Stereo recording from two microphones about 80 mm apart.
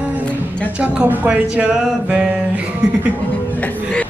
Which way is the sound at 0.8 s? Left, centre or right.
Centre.